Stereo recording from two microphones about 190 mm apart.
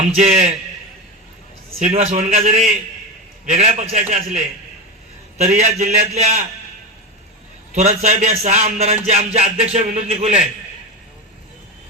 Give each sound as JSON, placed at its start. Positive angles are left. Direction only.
{"t": 0.2, "sound": "music", "side_deg": -35}
{"t": 1.8, "sound": "music", "side_deg": -35}
{"t": 5.4, "sound": "music", "side_deg": -35}
{"t": 7.7, "sound": "music", "side_deg": -35}